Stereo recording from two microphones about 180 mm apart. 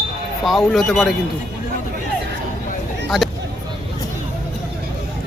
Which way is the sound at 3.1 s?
Centre (ahead or behind).